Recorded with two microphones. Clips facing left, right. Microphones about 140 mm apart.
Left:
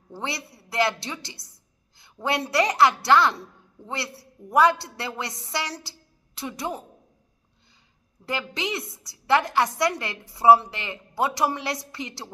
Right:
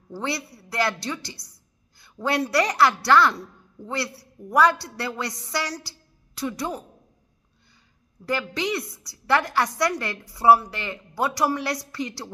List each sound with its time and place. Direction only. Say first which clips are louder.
0.1 s a man's voice: right 3 dB; 20° left (ahead or behind)
8.3 s a woman's voice: right 3 dB; 20° left (ahead or behind)